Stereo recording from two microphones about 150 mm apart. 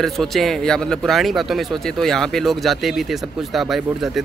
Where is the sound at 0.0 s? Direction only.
Centre (ahead or behind).